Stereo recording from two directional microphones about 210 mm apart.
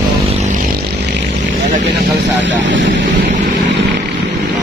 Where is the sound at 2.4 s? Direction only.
60° right (ahead or behind).